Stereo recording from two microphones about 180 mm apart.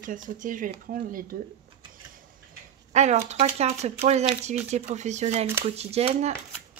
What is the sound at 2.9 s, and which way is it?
Speech, 40° right (ahead or behind).